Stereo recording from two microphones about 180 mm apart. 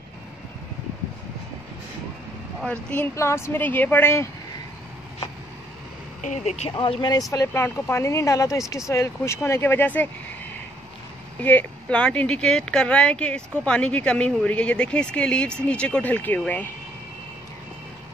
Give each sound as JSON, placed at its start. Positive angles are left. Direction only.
{"t": 2.6, "sound": "speech", "side_deg": 5}
{"t": 6.2, "sound": "speech", "side_deg": 40}
{"t": 6.7, "sound": "speech", "side_deg": 25}
{"t": 11.4, "sound": "speech", "side_deg": 10}